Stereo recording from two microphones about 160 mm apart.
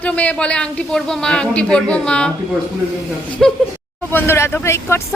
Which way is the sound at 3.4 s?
Centre (ahead or behind).